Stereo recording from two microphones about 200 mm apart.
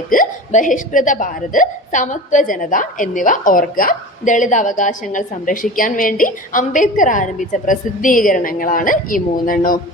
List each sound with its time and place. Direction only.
0.1 s speech: 40° left (ahead or behind)